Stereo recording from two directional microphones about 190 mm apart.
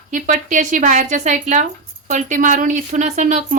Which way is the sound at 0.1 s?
40° right (ahead or behind).